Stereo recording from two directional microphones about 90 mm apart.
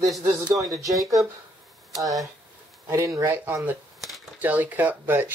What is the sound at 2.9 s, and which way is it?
Speech, 40° right (ahead or behind).